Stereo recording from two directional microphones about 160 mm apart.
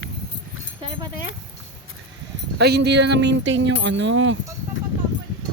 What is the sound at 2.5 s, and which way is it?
Speech, 90° right.